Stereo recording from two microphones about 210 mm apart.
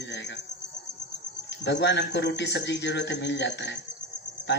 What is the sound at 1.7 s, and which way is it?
Speech, 55° left (ahead or behind).